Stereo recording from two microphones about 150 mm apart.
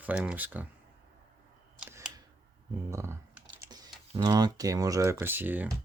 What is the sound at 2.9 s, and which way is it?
Speech, 20° right (ahead or behind).